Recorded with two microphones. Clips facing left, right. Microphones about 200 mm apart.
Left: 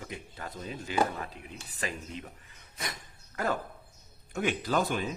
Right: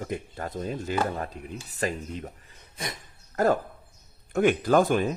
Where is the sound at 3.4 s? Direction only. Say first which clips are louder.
Right 9 dB; 40° right (ahead or behind).